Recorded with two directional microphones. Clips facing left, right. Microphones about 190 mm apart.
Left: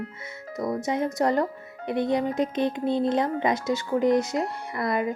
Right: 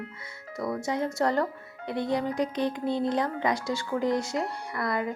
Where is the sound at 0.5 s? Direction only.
20° left (ahead or behind).